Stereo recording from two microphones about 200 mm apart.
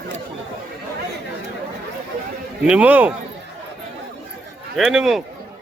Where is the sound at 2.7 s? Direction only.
5° right (ahead or behind).